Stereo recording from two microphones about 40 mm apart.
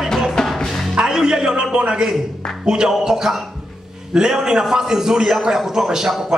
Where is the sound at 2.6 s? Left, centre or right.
Centre.